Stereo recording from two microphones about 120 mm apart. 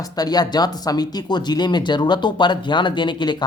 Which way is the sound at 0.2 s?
35° left (ahead or behind).